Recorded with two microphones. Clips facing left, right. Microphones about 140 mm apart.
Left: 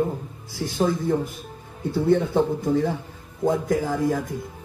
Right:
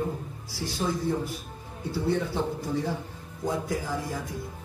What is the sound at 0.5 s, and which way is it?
A man's voice, 50° left (ahead or behind).